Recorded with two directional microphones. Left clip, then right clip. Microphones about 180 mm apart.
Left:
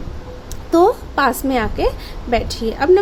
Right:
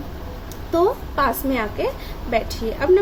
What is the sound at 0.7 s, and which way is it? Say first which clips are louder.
A woman's voice: left 6 dB; 55° left (ahead or behind).